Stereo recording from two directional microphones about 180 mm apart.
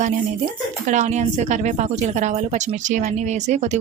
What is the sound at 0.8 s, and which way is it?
A woman's voice, 40° right (ahead or behind).